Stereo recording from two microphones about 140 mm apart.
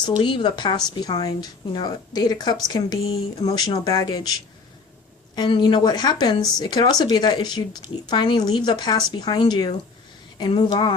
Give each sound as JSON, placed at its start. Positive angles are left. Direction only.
{"t": 0.0, "sound": "a woman's voice", "side_deg": 35}